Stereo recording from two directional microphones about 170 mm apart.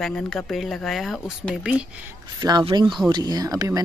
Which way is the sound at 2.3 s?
25° right (ahead or behind).